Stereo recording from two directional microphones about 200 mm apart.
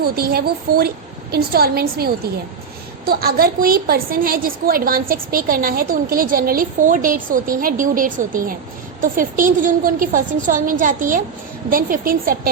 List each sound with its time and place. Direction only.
0.0 s a woman's voice: 50° right (ahead or behind)
3.1 s a woman's voice: 50° right (ahead or behind)